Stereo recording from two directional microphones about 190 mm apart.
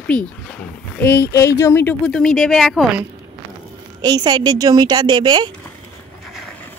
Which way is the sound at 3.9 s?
20° right (ahead or behind).